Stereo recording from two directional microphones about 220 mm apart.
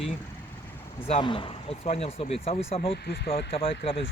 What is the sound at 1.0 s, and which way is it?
Speech, 25° left (ahead or behind).